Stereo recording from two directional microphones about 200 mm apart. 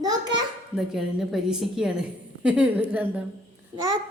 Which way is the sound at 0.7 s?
Centre (ahead or behind).